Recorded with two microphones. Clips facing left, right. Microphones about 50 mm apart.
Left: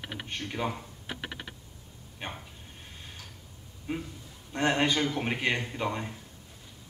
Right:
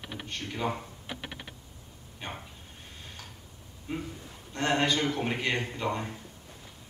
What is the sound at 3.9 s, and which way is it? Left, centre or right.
A man's voice, left.